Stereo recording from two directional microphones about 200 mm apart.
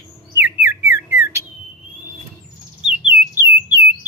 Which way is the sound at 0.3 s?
10° right (ahead or behind).